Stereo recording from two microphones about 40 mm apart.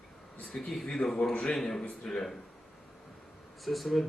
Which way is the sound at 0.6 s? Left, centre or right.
Centre.